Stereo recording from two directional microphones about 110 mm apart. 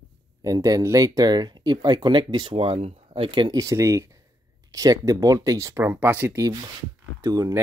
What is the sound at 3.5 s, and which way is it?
Speech, 30° right (ahead or behind).